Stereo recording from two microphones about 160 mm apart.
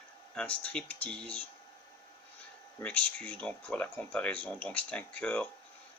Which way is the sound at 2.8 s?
5° left (ahead or behind).